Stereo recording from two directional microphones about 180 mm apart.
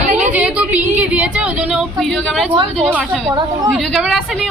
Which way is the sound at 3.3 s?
20° right (ahead or behind).